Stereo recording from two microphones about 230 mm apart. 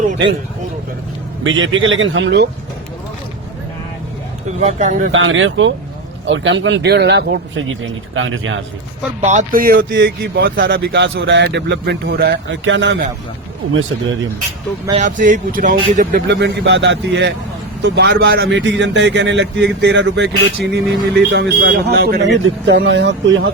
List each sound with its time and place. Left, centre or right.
1.5 s speech: right
4.6 s speech: right
5.1 s speech: right
9.2 s speech: right
14.9 s speech: right